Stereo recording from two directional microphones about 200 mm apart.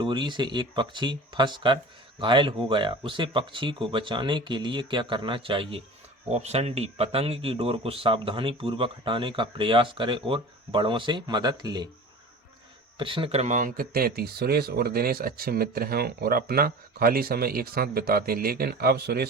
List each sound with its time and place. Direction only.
0.0 s speech: 25° right (ahead or behind)
13.0 s speech: 25° right (ahead or behind); by 19.3 s 50° right (ahead or behind)